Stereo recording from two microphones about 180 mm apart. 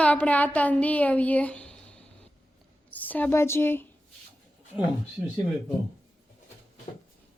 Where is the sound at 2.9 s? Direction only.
10° left (ahead or behind).